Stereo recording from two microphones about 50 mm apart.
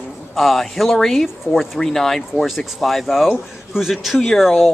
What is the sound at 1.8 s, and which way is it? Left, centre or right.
Speech, centre.